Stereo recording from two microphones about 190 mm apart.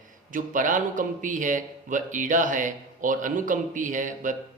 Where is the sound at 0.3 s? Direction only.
45° right (ahead or behind).